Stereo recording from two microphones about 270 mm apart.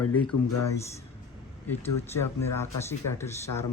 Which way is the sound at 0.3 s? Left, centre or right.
Left.